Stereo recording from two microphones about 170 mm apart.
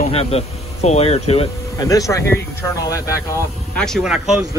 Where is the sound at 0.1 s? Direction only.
35° left (ahead or behind).